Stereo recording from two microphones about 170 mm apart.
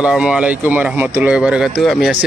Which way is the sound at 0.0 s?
5° right (ahead or behind).